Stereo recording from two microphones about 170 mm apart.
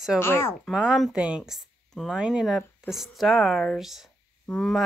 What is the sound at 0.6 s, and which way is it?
Speech, centre (ahead or behind).